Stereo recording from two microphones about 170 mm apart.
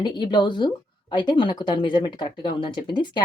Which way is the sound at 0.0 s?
25° left (ahead or behind).